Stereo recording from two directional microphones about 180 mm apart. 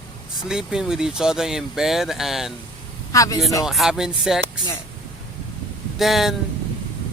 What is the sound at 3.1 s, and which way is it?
Speech, 20° left (ahead or behind).